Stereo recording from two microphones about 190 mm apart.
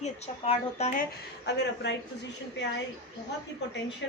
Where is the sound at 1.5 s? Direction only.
65° left (ahead or behind).